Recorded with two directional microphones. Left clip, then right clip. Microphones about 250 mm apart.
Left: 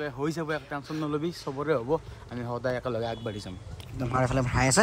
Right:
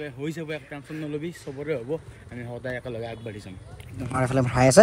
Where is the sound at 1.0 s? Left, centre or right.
Left.